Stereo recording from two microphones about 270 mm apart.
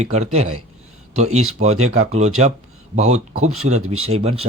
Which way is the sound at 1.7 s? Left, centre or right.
Right.